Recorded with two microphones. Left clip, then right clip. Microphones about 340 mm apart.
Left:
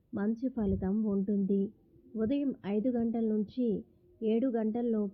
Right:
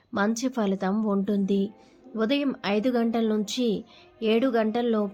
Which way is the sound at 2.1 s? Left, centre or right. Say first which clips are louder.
Right 7 dB; centre.